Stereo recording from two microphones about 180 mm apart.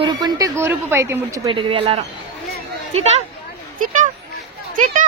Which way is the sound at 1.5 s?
30° right (ahead or behind).